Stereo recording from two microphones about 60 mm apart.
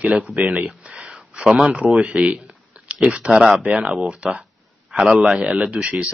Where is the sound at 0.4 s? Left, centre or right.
Centre.